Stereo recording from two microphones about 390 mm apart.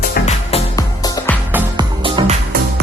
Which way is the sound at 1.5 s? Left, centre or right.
Centre.